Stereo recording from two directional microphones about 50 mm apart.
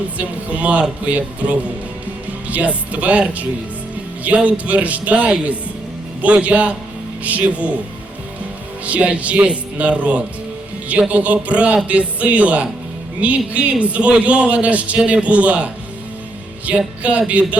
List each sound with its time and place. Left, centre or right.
0.2 s a man's voice: right
8.8 s a man's voice: right